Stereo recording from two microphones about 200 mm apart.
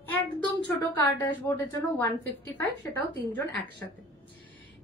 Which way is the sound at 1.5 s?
10° left (ahead or behind).